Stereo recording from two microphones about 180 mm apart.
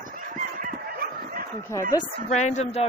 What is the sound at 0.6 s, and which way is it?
Fowl, 55° right (ahead or behind).